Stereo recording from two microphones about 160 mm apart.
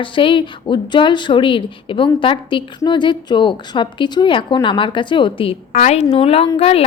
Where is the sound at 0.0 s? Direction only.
30° left (ahead or behind).